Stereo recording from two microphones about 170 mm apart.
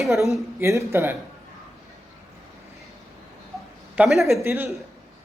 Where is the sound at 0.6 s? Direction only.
15° right (ahead or behind).